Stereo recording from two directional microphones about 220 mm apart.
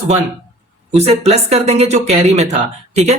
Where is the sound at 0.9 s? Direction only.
30° right (ahead or behind).